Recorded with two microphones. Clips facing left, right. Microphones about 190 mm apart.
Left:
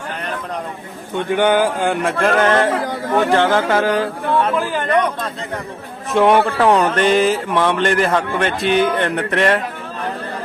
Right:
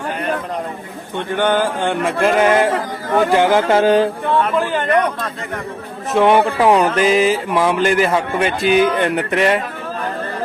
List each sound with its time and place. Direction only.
1.3 s a sound: 10° left (ahead or behind)
2.2 s speech: 10° right (ahead or behind)
2.7 s speech: centre (ahead or behind)
3.3 s speech: 10° right (ahead or behind)
3.7 s music: 25° right (ahead or behind)
6.1 s speech: centre (ahead or behind)